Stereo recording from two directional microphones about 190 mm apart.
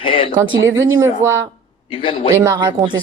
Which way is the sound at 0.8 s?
10° right (ahead or behind).